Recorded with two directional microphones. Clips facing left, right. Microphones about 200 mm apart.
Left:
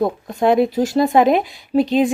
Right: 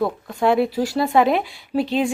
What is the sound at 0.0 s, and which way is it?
A woman's voice, 20° left (ahead or behind).